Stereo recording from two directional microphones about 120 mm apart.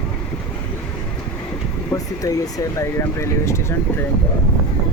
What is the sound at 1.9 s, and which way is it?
Speech, 30° left (ahead or behind).